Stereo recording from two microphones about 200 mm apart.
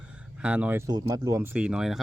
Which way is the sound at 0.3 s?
5° right (ahead or behind).